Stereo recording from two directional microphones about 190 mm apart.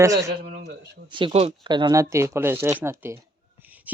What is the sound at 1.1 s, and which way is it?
Speech, 25° right (ahead or behind).